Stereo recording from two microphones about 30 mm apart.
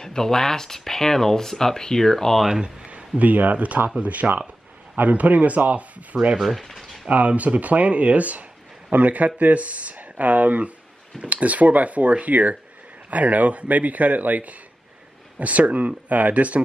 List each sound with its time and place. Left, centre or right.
0.0 s speech: centre
3.2 s speech: right
6.4 s speech: centre
7.1 s speech: right